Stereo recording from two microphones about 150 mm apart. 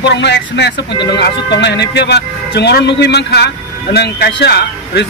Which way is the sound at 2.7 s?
90° left.